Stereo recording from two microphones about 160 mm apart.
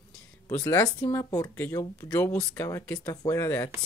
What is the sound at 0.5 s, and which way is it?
Speech, 15° left (ahead or behind).